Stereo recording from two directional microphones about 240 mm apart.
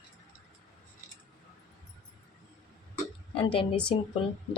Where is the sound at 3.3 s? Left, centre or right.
Left.